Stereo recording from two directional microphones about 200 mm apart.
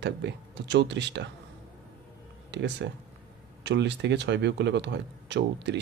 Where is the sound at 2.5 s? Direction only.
60° right (ahead or behind).